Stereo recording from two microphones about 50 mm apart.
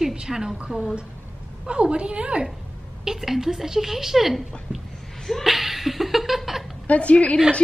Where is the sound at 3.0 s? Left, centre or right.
Centre.